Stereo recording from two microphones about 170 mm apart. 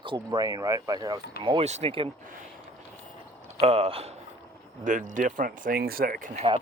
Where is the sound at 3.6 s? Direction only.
35° right (ahead or behind).